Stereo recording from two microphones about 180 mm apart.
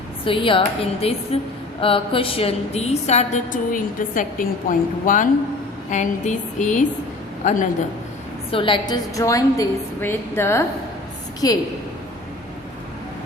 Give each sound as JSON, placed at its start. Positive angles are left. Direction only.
{"t": 0.3, "sound": "a woman's voice", "side_deg": 30}
{"t": 8.4, "sound": "a woman's voice", "side_deg": 30}